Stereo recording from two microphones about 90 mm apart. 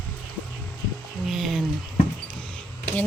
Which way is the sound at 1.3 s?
Centre (ahead or behind).